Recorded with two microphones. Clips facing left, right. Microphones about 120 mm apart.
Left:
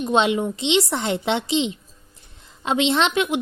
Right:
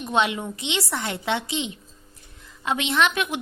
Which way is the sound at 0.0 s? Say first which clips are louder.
Left 4 dB; 25° left (ahead or behind).